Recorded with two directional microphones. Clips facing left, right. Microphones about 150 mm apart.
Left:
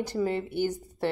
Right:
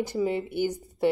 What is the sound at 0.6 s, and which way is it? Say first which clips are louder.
Speech: right 4 dB; 20° right (ahead or behind).